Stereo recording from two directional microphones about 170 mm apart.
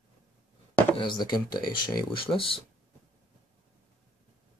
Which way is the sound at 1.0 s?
25° left (ahead or behind).